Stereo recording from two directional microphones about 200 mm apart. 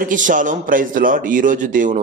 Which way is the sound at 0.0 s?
40° right (ahead or behind).